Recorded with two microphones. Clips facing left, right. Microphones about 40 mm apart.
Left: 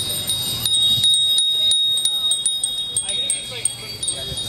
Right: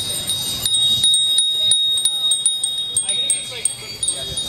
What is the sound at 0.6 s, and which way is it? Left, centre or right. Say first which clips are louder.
Chime: even; centre.